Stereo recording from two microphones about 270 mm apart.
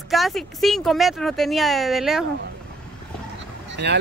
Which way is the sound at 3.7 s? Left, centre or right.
Right.